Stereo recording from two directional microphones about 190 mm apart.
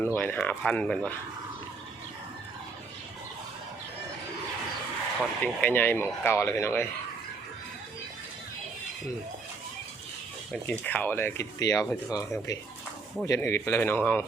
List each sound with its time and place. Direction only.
0.0 s speech: 10° left (ahead or behind)
5.2 s speech: 5° left (ahead or behind)
10.5 s speech: 10° left (ahead or behind)